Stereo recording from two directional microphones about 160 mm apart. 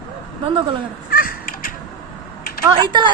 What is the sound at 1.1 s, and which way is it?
Crow, 65° left (ahead or behind).